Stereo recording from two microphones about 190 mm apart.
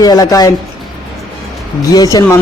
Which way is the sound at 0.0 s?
20° left (ahead or behind).